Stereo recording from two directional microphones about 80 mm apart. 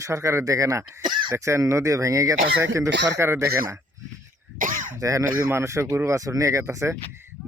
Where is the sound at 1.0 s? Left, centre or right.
Right.